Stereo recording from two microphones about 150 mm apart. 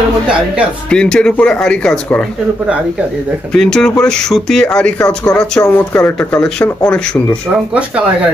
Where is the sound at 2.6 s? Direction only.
10° right (ahead or behind).